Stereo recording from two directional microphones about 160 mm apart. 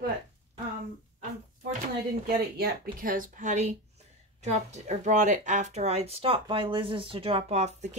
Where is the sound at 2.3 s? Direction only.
65° right (ahead or behind).